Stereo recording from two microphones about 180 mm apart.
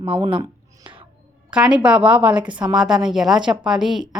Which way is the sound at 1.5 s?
5° right (ahead or behind).